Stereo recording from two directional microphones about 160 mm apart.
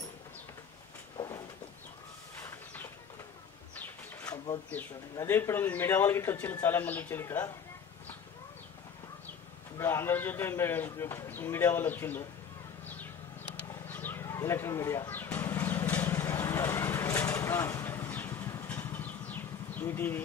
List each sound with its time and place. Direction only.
1.1 s a sound: 25° left (ahead or behind)
2.4 s bird: 15° left (ahead or behind)
3.7 s pigeon: 10° left (ahead or behind)
5.1 s a man's voice: 15° left (ahead or behind)
9.8 s a man's voice: 15° left (ahead or behind)
13.8 s bird: 10° left (ahead or behind)